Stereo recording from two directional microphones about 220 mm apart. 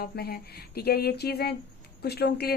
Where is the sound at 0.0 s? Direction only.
45° left (ahead or behind).